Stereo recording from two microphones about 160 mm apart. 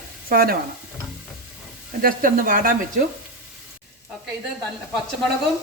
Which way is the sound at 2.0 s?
60° right (ahead or behind).